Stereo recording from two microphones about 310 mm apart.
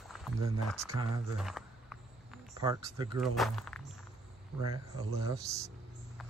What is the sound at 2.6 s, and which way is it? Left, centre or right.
Speech, centre.